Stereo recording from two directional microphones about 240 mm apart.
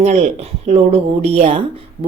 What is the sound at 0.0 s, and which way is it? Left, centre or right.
Speech, right.